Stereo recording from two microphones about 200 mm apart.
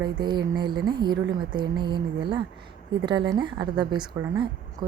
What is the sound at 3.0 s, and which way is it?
Speech, 20° right (ahead or behind).